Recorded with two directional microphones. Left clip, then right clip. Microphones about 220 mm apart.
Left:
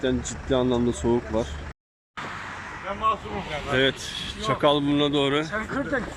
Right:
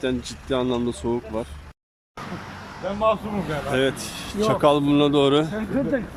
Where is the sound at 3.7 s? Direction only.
10° right (ahead or behind).